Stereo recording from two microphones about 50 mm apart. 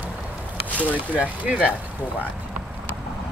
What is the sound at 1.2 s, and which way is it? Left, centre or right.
Speech, right.